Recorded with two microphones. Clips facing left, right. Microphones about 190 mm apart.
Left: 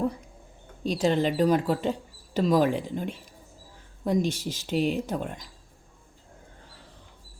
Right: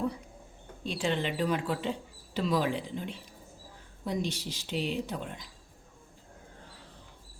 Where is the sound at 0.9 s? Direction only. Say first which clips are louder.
Left 7 dB; 40° left (ahead or behind).